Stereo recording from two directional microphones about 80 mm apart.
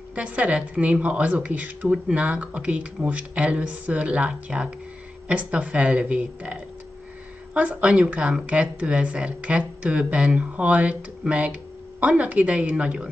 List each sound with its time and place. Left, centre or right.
0.1 s a woman's voice: centre